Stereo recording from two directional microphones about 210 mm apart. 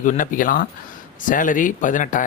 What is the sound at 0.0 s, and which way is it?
Speech, 40° left (ahead or behind).